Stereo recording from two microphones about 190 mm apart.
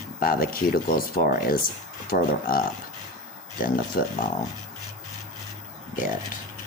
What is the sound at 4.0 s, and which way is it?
Speech, 50° left (ahead or behind).